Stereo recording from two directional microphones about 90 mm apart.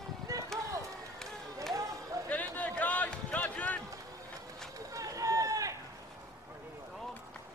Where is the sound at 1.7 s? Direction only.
40° right (ahead or behind).